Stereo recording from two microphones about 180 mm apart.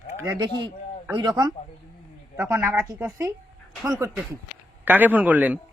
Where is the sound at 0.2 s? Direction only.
20° right (ahead or behind).